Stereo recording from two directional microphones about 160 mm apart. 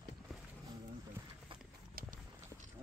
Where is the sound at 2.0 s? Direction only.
65° right (ahead or behind).